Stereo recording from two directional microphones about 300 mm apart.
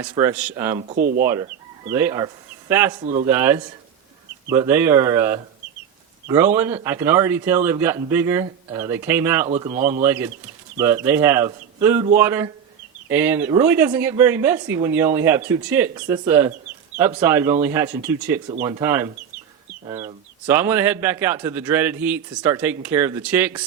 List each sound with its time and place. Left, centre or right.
0.1 s speech: centre
0.8 s speech: right
1.2 s speech: centre
3.0 s speech: right
3.2 s speech: centre
9.5 s speech: right
10.0 s speech: centre